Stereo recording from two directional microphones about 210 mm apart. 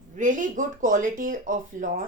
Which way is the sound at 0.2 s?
35° right (ahead or behind).